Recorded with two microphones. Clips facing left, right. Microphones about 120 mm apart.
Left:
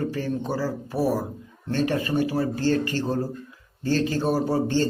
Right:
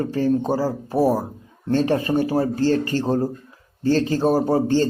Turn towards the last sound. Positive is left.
turn(degrees=-35)  # may be behind; listen again after turning